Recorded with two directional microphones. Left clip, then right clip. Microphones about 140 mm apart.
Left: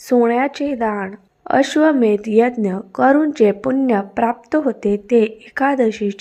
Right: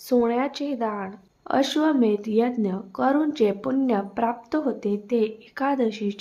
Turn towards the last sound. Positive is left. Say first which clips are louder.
# left 7 dB
turn(degrees=35)  # may be behind; listen again after turning